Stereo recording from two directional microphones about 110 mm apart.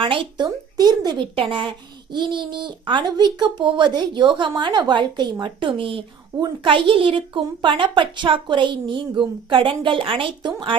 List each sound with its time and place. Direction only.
0.0 s speech: 50° right (ahead or behind)